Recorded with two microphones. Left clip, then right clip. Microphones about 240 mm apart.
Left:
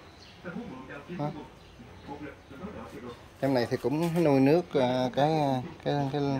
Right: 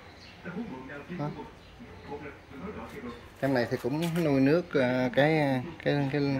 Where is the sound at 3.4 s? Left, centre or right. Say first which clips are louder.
Left 1 dB; centre.